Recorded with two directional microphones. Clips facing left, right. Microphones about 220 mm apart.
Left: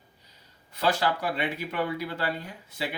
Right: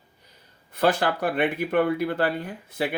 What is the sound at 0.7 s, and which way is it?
Speech, 55° right (ahead or behind).